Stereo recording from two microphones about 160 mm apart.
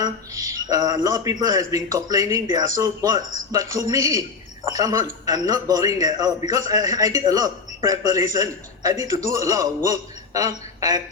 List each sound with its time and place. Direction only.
0.0 s a man's voice: 20° right (ahead or behind)